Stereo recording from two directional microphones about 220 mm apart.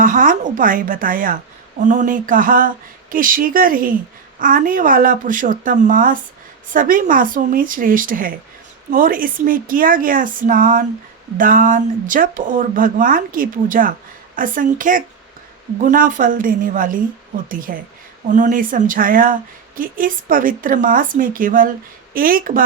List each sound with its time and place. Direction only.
0.0 s a woman's voice: 35° right (ahead or behind)